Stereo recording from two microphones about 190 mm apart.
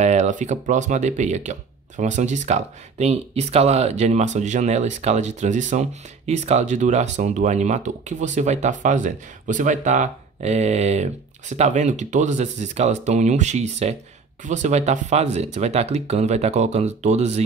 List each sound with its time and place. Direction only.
0.0 s speech: 35° right (ahead or behind)